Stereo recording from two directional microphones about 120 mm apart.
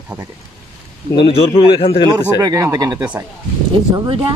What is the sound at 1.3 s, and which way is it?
Speech, 50° left (ahead or behind).